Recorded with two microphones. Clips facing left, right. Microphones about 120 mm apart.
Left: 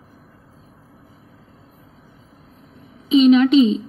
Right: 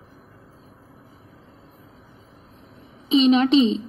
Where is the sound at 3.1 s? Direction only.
35° right (ahead or behind).